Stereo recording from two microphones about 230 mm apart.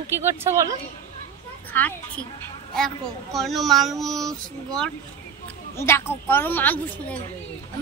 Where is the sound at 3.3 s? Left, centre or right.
Centre.